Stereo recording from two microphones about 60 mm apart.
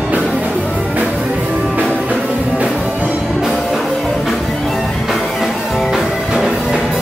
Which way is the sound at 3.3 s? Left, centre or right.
Centre.